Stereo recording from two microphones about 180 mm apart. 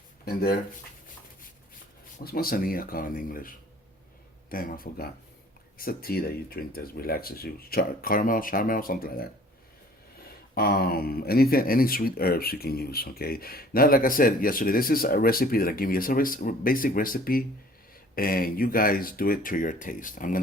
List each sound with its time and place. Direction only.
0.3 s speech: 55° left (ahead or behind)
2.1 s speech: 55° left (ahead or behind)
10.5 s speech: 60° left (ahead or behind)